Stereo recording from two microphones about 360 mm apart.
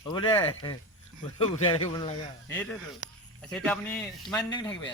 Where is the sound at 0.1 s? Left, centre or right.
Centre.